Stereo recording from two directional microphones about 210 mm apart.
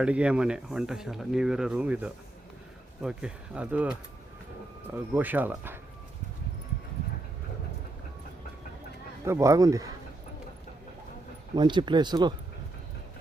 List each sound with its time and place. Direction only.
0.0 s speech: 5° right (ahead or behind)
5.1 s speech: 10° right (ahead or behind)
9.2 s speech: 15° right (ahead or behind)
11.5 s speech: 20° right (ahead or behind)